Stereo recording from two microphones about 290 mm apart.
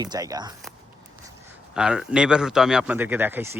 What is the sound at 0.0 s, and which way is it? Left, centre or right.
Speech, centre.